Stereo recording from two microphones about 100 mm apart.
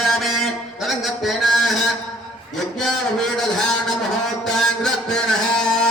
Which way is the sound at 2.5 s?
5° left (ahead or behind).